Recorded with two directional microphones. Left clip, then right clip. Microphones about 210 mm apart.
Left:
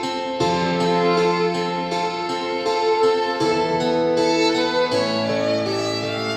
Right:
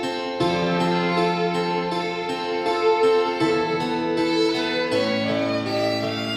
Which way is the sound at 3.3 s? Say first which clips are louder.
Left 2 dB; 15° left (ahead or behind).